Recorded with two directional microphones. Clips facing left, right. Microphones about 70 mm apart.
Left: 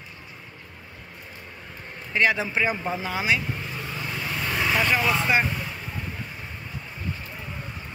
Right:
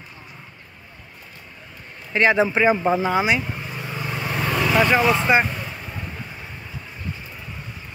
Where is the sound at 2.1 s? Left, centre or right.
Right.